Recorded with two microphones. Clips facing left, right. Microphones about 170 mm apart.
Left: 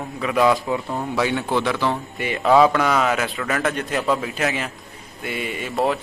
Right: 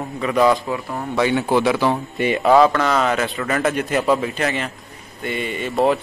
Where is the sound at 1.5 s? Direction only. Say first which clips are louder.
Right 5 dB; 10° right (ahead or behind).